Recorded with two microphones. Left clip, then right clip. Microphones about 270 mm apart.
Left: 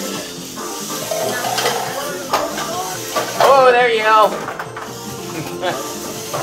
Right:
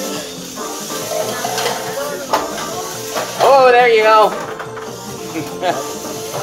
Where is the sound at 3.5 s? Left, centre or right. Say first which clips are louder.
Right 5 dB; right.